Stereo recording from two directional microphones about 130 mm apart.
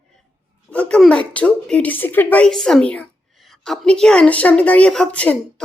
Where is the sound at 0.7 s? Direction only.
10° left (ahead or behind).